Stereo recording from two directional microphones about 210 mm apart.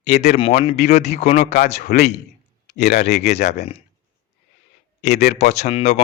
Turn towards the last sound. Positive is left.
turn(degrees=35)  # may be behind; listen again after turning